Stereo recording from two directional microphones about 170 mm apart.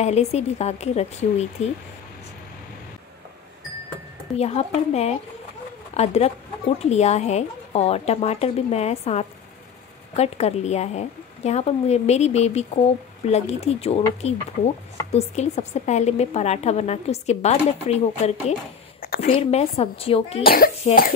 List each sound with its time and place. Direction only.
0.0 s a woman's voice: 40° left (ahead or behind)
4.4 s a woman's voice: 40° left (ahead or behind)
18.9 s a sound: 60° left (ahead or behind)
19.3 s a woman's voice: 35° left (ahead or behind)
20.4 s speech: 60° left (ahead or behind)